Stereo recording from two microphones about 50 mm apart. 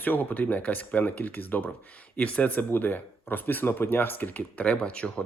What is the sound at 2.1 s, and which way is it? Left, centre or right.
Speech, left.